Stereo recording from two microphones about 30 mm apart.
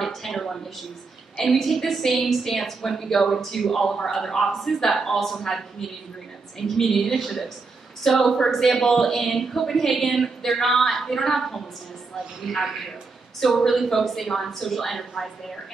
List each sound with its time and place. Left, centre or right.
0.0 s a woman's voice: centre